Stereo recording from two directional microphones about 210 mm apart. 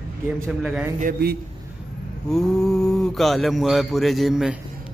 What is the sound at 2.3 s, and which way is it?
Speech, centre (ahead or behind).